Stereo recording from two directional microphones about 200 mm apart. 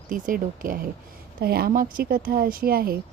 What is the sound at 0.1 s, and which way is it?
Speech, 45° right (ahead or behind).